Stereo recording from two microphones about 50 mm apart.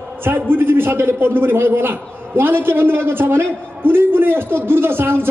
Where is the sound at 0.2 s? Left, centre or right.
Right.